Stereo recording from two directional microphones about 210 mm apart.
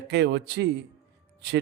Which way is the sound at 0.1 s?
55° right (ahead or behind).